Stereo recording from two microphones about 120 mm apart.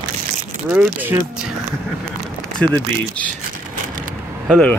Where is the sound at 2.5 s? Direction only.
10° left (ahead or behind).